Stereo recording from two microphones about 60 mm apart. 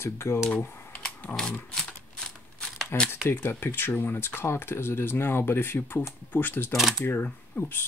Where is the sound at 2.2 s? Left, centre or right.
Centre.